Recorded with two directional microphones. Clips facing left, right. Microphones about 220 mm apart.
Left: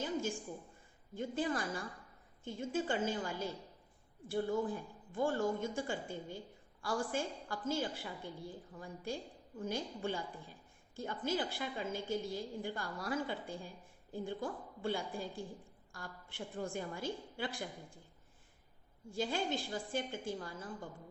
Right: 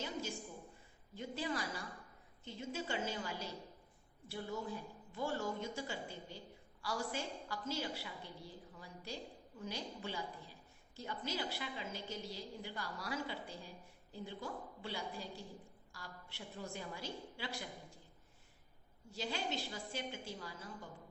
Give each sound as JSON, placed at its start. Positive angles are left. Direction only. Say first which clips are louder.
{"t": 0.0, "sound": "a sound", "louder": "left 6 dB", "side_deg": 50}
{"t": 1.1, "sound": "a woman's voice", "louder": "left 5 dB", "side_deg": 50}
{"t": 19.1, "sound": "a woman's voice", "louder": "left 5 dB", "side_deg": 50}